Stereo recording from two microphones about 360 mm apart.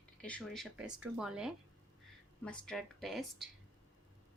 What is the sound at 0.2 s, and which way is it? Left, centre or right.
Speech, centre.